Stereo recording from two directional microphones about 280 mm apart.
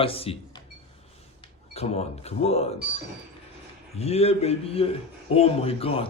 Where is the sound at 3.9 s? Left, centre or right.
Left.